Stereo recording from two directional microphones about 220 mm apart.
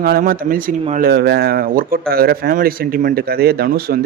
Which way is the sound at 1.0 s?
45° right (ahead or behind).